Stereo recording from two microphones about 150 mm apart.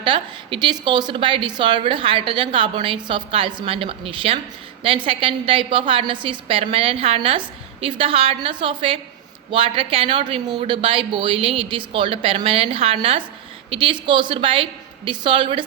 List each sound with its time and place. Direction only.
0.0 s a woman's voice: 35° right (ahead or behind)